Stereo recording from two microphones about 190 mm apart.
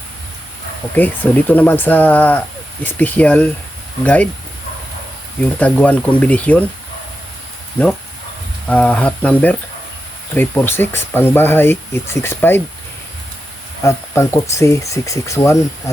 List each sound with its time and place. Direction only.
0.9 s speech: 10° left (ahead or behind)
5.5 s speech: 5° left (ahead or behind)
8.6 s speech: 5° left (ahead or behind)
13.8 s speech: 15° left (ahead or behind)